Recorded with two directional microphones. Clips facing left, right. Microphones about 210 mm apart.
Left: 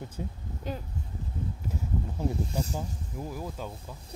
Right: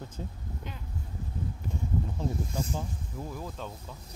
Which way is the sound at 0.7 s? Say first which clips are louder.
Left 11 dB; 35° left (ahead or behind).